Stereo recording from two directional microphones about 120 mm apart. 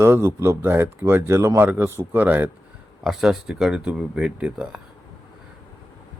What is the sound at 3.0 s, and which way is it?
Speech, 5° right (ahead or behind).